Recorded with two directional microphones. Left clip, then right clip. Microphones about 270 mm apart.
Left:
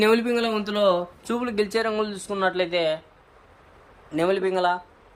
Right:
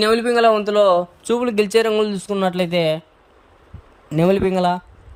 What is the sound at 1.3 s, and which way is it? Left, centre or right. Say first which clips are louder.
Speech: right 6 dB; right.